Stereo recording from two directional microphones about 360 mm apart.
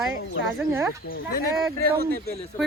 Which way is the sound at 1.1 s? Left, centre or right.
Left.